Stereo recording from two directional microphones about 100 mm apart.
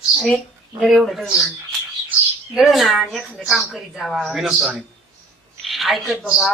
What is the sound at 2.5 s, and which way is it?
A woman's voice, centre (ahead or behind).